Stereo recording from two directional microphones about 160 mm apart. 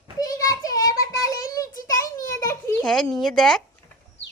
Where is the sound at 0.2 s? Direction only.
20° left (ahead or behind).